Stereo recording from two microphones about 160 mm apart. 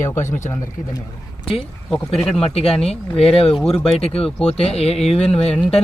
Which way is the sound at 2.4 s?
40° left (ahead or behind).